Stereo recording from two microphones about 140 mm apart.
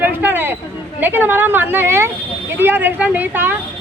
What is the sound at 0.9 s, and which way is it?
Speech, 15° right (ahead or behind).